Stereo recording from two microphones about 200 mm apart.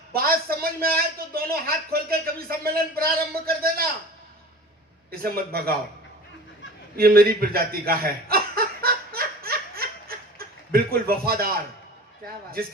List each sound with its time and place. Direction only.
0.1 s a man's voice: 50° right (ahead or behind)
5.1 s a man's voice: 50° right (ahead or behind)
6.9 s chuckle: 50° right (ahead or behind)